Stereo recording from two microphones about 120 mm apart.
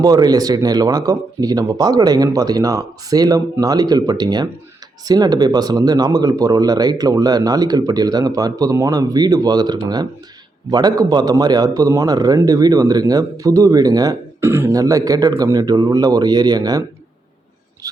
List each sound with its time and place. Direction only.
0.0 s speech: 35° right (ahead or behind)
14.4 s speech: 20° right (ahead or behind)